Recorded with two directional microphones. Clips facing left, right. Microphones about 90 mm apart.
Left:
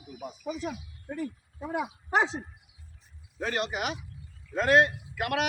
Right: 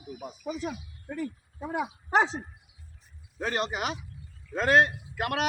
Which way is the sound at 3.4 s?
35° right (ahead or behind).